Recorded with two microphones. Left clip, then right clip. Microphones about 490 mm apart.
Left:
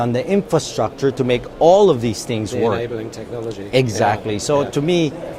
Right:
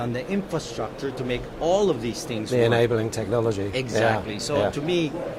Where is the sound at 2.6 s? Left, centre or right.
Right.